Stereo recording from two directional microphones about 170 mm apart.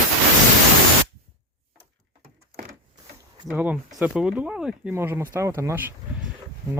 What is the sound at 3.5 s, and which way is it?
Speech, 10° right (ahead or behind).